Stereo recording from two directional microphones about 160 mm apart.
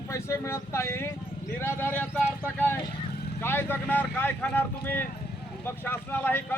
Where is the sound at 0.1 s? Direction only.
20° left (ahead or behind).